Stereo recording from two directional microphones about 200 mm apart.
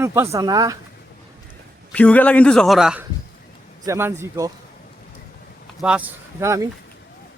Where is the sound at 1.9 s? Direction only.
5° left (ahead or behind); by 4.5 s 15° right (ahead or behind).